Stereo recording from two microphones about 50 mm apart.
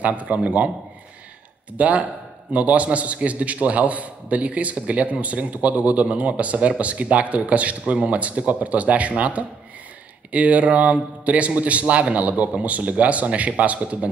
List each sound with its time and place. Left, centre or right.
0.0 s a man's voice: right
1.8 s a man's voice: right